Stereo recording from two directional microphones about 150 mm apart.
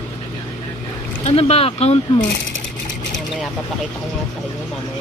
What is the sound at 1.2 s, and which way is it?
Speech, 45° left (ahead or behind).